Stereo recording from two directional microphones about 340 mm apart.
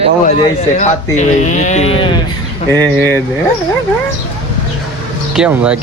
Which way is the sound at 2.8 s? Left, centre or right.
Centre.